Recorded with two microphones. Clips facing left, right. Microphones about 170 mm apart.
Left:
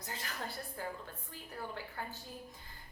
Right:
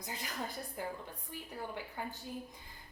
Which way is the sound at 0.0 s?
15° right (ahead or behind).